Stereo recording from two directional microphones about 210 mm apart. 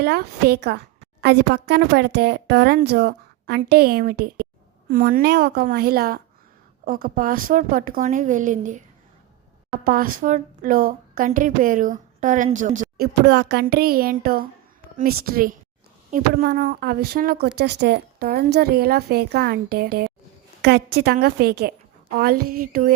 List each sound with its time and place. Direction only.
0.0 s a woman's voice: 50° right (ahead or behind)
9.8 s a woman's voice: 45° right (ahead or behind)